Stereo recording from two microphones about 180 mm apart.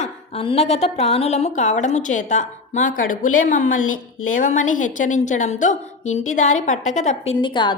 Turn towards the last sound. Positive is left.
turn(degrees=25)  # may be behind; listen again after turning